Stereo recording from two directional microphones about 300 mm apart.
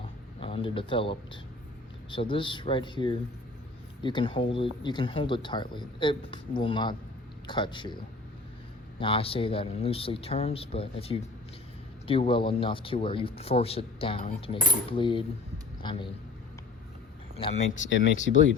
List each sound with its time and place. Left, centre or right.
0.3 s speech: centre
9.0 s speech: centre
17.3 s speech: centre
17.7 s speech: left